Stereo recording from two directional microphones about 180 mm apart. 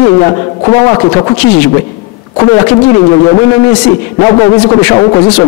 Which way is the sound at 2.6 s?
25° left (ahead or behind).